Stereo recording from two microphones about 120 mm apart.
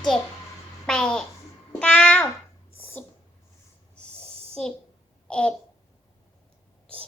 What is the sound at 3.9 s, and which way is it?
Snort, 10° left (ahead or behind).